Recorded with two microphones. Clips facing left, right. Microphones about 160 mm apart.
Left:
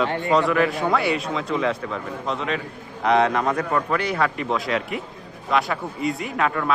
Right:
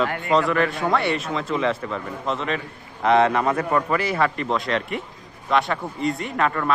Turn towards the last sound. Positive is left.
turn(degrees=0)  # may be behind; listen again after turning